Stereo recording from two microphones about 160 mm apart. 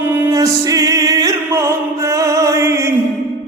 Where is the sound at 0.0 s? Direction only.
15° right (ahead or behind).